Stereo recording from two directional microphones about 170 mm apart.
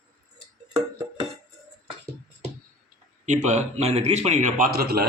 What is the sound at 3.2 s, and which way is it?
A man's voice, 45° right (ahead or behind).